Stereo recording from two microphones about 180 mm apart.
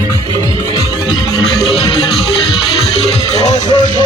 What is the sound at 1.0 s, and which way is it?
Music, 25° left (ahead or behind).